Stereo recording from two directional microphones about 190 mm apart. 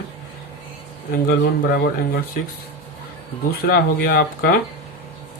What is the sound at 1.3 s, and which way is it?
Speech, 60° left (ahead or behind).